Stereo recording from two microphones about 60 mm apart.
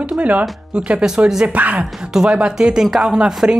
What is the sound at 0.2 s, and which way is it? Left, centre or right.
Speech, right.